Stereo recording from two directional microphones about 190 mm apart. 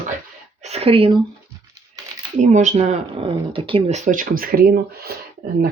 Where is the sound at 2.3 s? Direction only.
40° right (ahead or behind).